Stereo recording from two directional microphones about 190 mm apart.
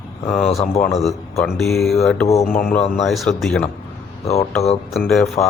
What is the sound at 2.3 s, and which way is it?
Speech, 35° left (ahead or behind).